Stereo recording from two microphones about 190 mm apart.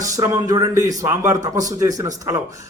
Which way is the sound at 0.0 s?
20° right (ahead or behind).